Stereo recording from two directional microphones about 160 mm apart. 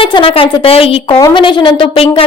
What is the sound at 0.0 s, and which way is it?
A woman's voice, 35° left (ahead or behind).